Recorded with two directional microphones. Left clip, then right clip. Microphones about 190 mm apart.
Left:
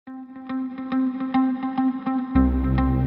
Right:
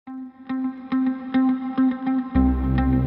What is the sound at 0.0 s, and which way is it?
Music, centre (ahead or behind).